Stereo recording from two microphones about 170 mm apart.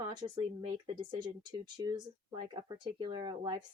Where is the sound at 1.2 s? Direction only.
25° right (ahead or behind).